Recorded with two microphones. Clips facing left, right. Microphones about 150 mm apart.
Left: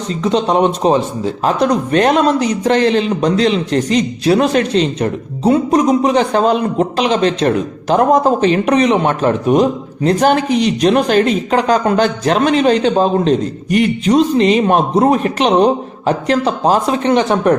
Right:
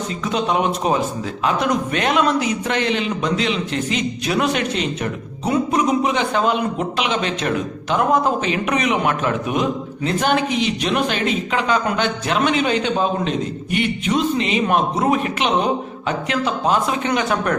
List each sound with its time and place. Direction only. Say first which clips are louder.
0.3 s a man's voice: left 7 dB; 35° left (ahead or behind)